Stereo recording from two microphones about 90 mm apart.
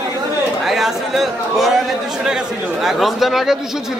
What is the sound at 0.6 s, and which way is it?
A man's voice, 5° right (ahead or behind).